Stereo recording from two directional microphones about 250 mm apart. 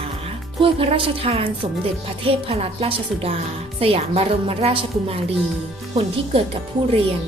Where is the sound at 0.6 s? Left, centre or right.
Right.